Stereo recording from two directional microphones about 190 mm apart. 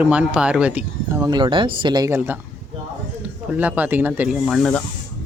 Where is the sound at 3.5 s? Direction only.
10° right (ahead or behind).